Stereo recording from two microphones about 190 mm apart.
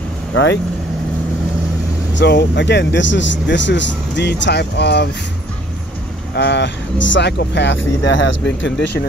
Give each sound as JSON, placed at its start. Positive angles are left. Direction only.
{"t": 0.3, "sound": "speech", "side_deg": 75}
{"t": 2.1, "sound": "speech", "side_deg": 65}
{"t": 6.3, "sound": "speech", "side_deg": 65}